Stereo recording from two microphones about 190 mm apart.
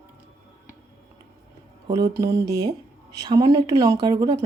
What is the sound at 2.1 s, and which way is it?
Speech, 15° right (ahead or behind).